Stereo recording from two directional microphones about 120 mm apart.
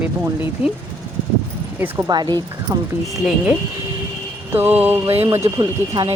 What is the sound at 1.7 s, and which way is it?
Speech, 15° right (ahead or behind).